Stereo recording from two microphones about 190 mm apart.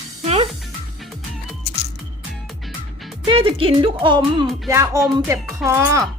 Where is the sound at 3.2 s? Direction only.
30° right (ahead or behind).